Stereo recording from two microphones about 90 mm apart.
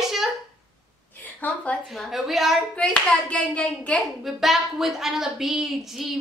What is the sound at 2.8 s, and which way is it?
Hands, 15° left (ahead or behind).